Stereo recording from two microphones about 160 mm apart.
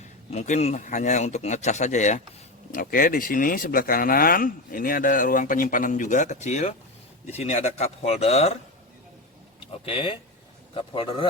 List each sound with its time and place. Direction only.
0.3 s speech: 45° left (ahead or behind)
2.7 s speech: 60° left (ahead or behind); by 8.5 s 40° left (ahead or behind)
9.8 s speech: 30° left (ahead or behind)